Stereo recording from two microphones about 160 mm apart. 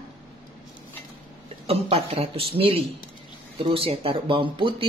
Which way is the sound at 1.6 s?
40° right (ahead or behind).